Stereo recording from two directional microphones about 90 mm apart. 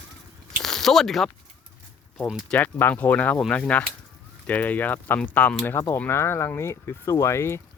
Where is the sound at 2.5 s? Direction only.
20° left (ahead or behind).